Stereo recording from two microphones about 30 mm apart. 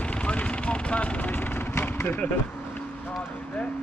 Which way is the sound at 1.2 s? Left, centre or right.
Left.